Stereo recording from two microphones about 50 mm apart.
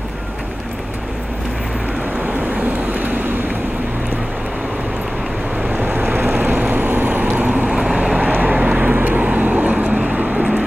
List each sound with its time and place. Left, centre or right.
2.2 s vehicle: right
5.7 s vehicle: right
7.6 s vehicle: centre
8.0 s vehicle: right
9.2 s vehicle: right